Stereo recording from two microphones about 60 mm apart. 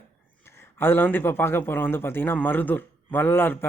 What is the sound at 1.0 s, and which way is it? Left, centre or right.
Speech, left.